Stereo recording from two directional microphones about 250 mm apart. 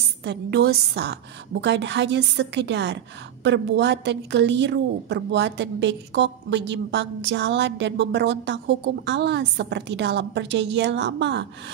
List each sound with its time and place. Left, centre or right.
0.2 s a woman's voice: right